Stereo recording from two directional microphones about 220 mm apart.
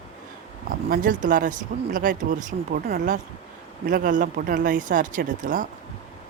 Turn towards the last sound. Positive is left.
turn(degrees=-35)  # may be behind; listen again after turning